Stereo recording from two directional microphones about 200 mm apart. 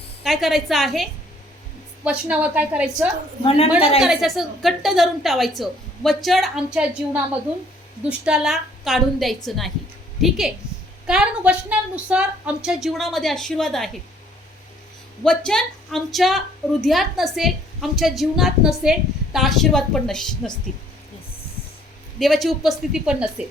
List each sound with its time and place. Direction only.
0.2 s a woman's voice: centre (ahead or behind)
3.4 s a woman's voice: 30° left (ahead or behind)
4.0 s a woman's voice: centre (ahead or behind)
15.2 s a woman's voice: 5° left (ahead or behind)
22.2 s a woman's voice: centre (ahead or behind)